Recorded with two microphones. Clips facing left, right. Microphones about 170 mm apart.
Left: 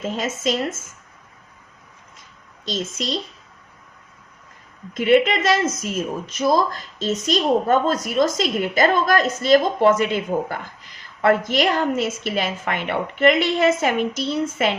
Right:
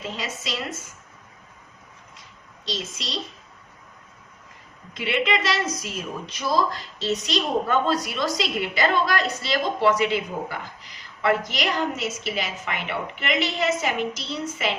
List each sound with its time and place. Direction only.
0.0 s a woman's voice: 45° left (ahead or behind)
2.6 s a woman's voice: 50° left (ahead or behind)
4.9 s a woman's voice: 45° left (ahead or behind)